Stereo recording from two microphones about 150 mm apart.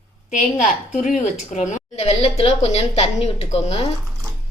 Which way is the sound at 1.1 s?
55° left (ahead or behind).